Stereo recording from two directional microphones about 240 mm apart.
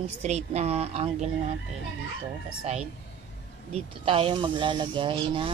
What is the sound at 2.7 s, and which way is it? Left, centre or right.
Speech, right.